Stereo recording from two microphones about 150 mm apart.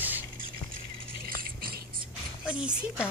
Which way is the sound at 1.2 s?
75° right (ahead or behind).